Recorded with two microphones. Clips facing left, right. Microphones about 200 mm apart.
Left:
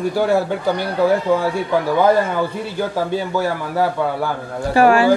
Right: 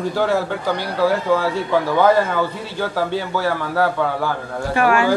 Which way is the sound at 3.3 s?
15° left (ahead or behind).